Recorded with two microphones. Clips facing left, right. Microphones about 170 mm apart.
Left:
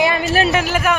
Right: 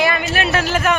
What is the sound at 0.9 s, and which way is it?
Mantra, 5° left (ahead or behind).